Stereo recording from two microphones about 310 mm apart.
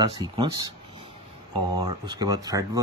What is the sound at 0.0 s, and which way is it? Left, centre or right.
Speech, centre.